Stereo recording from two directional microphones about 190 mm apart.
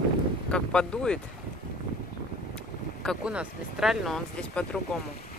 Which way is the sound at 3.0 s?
5° right (ahead or behind).